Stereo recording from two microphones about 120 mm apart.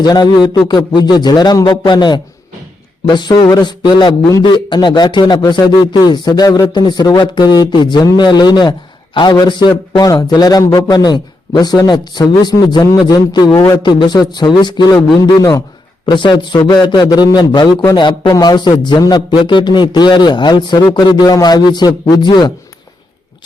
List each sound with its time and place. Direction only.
0.0 s speech: 35° left (ahead or behind)
16.0 s speech: 40° left (ahead or behind)